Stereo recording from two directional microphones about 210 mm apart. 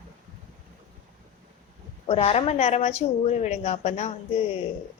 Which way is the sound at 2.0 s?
25° left (ahead or behind).